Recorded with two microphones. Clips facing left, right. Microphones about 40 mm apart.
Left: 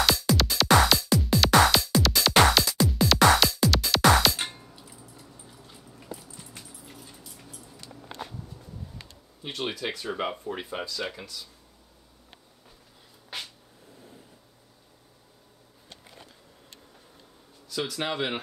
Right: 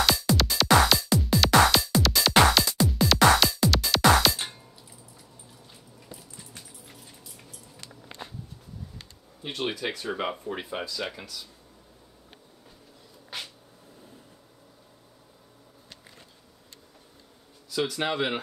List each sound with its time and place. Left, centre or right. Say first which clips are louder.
0.0 s music: even; centre
9.4 s speech: right 1 dB; centre
17.6 s speech: right 3 dB; centre